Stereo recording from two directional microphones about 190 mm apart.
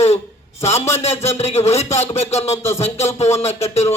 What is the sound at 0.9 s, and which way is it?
A man's voice, 35° left (ahead or behind).